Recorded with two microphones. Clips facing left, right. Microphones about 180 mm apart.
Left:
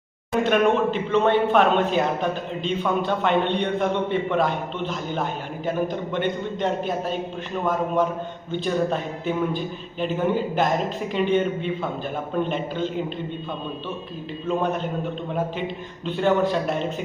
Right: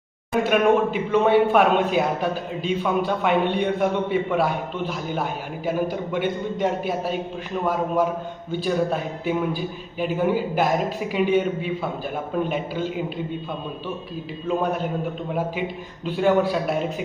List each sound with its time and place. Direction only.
0.4 s a man's voice: 5° right (ahead or behind)
14.4 s a man's voice: 5° right (ahead or behind)